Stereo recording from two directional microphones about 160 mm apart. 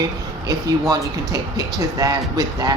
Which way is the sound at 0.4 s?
25° right (ahead or behind).